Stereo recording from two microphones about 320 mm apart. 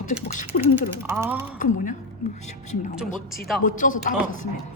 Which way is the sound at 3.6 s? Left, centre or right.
Left.